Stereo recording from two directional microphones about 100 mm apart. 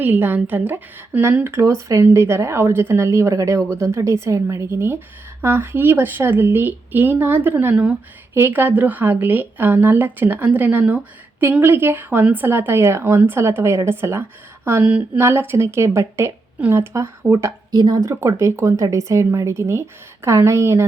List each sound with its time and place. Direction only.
0.0 s a woman's voice: 20° right (ahead or behind)
1.6 s a woman's voice: 30° right (ahead or behind)
17.7 s speech: 45° right (ahead or behind)
18.1 s a woman's voice: 30° right (ahead or behind)